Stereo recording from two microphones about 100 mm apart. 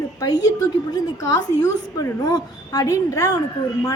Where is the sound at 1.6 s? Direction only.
35° left (ahead or behind).